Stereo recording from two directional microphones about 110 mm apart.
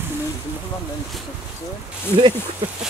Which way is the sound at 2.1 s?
70° right (ahead or behind).